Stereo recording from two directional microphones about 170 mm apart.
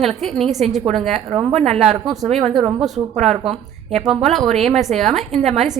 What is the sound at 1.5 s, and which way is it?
Speech, 40° right (ahead or behind).